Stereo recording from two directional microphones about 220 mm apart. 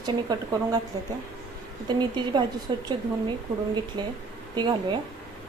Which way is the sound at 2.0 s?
20° right (ahead or behind).